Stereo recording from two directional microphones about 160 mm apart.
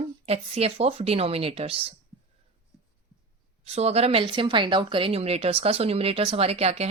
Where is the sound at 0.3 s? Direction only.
40° right (ahead or behind).